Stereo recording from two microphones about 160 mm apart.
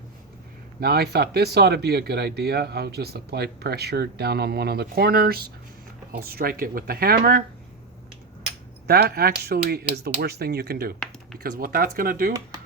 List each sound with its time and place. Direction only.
0.8 s speech: 80° right
8.9 s speech: 80° right
11.6 s speech: 65° right (ahead or behind)